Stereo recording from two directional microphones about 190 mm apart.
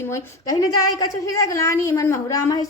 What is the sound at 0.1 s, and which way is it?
A woman's voice, 20° left (ahead or behind).